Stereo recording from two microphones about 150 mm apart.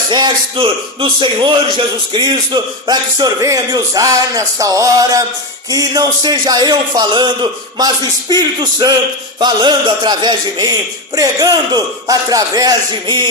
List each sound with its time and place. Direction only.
0.1 s speech: 30° right (ahead or behind)